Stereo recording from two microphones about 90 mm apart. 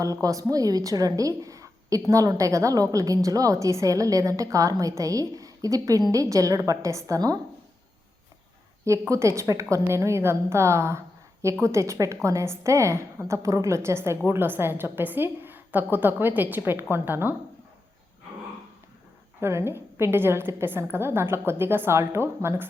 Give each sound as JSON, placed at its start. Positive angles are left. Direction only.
{"t": 0.0, "sound": "a woman's voice", "side_deg": -40}
{"t": 1.4, "sound": "a sound", "side_deg": -40}
{"t": 2.0, "sound": "a woman's voice", "side_deg": -35}
{"t": 8.8, "sound": "a woman's voice", "side_deg": -35}
{"t": 19.4, "sound": "a woman's voice", "side_deg": -30}